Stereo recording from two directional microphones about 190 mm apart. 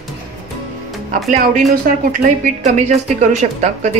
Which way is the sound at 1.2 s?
45° right (ahead or behind).